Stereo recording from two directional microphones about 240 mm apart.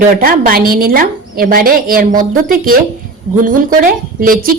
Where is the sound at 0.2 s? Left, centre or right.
Right.